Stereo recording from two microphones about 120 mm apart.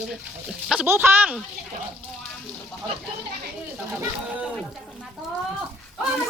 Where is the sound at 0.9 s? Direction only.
20° right (ahead or behind).